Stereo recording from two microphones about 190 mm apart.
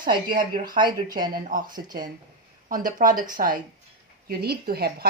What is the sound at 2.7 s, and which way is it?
Speech, 45° right (ahead or behind).